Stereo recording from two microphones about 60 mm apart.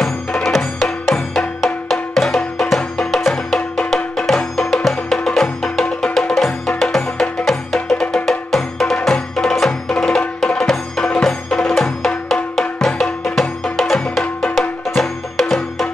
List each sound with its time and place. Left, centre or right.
0.8 s music: centre
3.5 s music: centre
3.9 s music: centre